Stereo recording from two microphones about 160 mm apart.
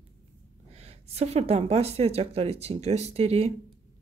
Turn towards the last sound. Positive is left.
turn(degrees=-40)  # may be behind; listen again after turning